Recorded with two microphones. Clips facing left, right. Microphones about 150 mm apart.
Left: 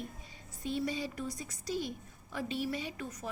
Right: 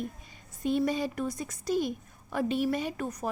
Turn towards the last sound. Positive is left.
turn(degrees=-50)  # may be behind; listen again after turning